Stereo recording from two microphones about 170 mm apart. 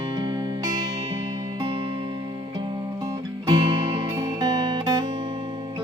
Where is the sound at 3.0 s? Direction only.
25° right (ahead or behind).